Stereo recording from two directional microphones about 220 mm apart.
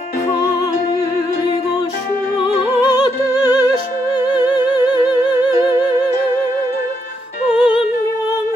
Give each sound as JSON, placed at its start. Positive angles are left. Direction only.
{"t": 2.8, "sound": "music", "side_deg": 15}
{"t": 7.5, "sound": "music", "side_deg": -5}